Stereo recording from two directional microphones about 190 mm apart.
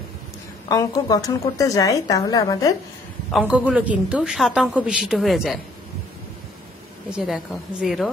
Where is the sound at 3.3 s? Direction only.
5° right (ahead or behind).